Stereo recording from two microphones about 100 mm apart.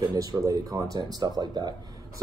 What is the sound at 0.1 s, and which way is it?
Speech, 35° right (ahead or behind).